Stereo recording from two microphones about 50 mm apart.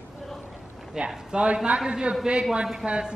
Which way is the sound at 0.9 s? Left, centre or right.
Centre.